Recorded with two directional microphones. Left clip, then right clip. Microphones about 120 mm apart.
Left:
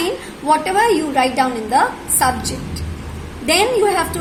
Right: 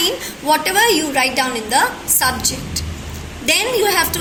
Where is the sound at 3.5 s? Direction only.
45° left (ahead or behind).